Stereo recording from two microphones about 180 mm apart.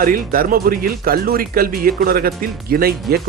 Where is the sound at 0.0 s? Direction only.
50° right (ahead or behind).